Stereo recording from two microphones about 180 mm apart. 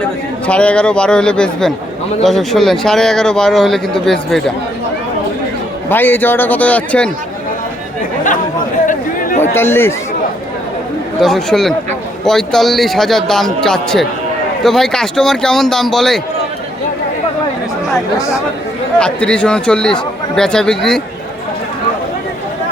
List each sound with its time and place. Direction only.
0.4 s speech: 5° left (ahead or behind)
5.9 s a man's voice: 10° left (ahead or behind)
9.4 s a man's voice: 15° left (ahead or behind)
11.2 s speech: centre (ahead or behind)
18.2 s a man's voice: 15° left (ahead or behind)
18.9 s speech: 5° left (ahead or behind)